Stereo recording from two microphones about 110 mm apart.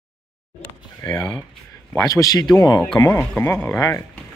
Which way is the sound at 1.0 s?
40° left (ahead or behind).